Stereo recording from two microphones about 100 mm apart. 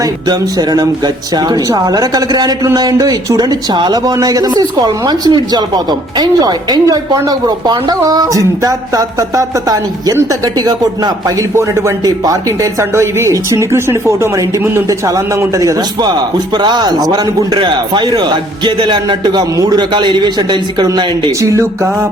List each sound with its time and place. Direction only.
0.0 s speech: 40° right (ahead or behind)
11.5 s speech: 30° right (ahead or behind)
16.6 s speech: 45° right (ahead or behind)